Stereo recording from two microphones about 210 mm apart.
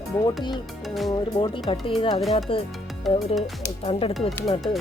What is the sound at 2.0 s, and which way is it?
Speech, 25° left (ahead or behind).